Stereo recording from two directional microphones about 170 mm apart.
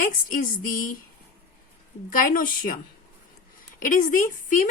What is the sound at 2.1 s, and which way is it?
Speech, 55° left (ahead or behind).